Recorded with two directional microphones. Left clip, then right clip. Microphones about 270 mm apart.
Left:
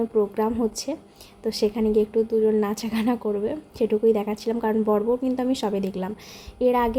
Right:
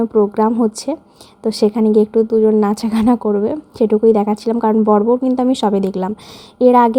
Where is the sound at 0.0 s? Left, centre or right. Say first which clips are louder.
Right 9 dB; centre.